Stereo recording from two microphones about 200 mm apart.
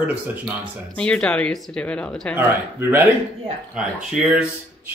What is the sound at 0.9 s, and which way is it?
A man's voice, 5° left (ahead or behind).